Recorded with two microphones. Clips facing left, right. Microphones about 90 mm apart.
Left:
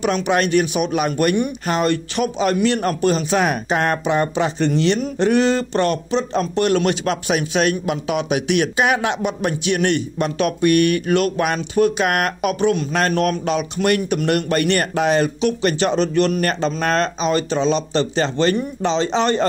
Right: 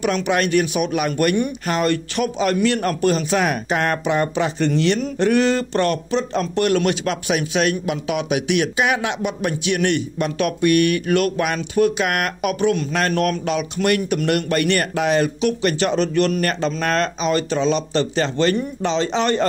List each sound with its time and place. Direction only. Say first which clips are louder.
0.0 s a man's voice: left 1 dB; 25° left (ahead or behind)